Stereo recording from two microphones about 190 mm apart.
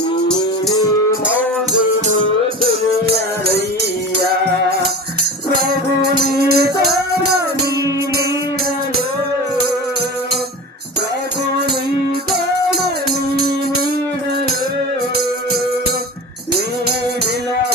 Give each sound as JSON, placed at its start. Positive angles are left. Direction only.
{"t": 0.3, "sound": "music", "side_deg": 20}
{"t": 6.1, "sound": "music", "side_deg": -55}